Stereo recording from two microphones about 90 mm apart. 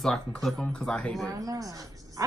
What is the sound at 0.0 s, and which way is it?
Speech, 5° left (ahead or behind).